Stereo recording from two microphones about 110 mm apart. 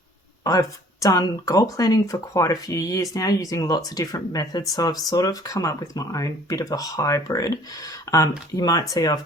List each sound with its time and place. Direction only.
0.4 s speech: 35° left (ahead or behind)